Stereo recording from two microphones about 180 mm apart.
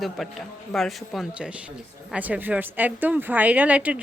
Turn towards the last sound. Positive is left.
turn(degrees=-5)  # may be behind; listen again after turning